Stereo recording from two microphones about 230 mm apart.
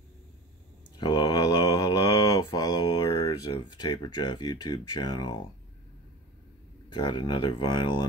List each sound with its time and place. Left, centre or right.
0.9 s mantra: centre
6.9 s speech: centre